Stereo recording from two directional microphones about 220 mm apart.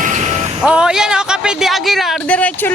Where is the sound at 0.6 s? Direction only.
5° right (ahead or behind).